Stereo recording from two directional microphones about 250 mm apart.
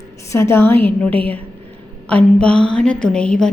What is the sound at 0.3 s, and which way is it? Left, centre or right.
A woman's voice, centre.